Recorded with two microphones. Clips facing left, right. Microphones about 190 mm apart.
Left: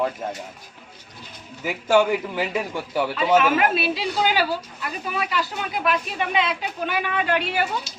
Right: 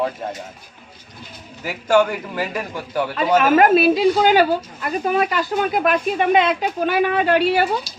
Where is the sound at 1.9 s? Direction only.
10° left (ahead or behind).